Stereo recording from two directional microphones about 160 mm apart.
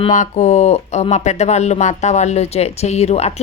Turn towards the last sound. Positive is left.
turn(degrees=45)  # may be behind; listen again after turning